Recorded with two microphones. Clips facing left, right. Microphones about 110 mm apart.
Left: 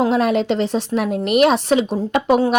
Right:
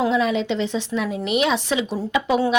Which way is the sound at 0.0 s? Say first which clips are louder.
Left 3 dB; 55° left (ahead or behind).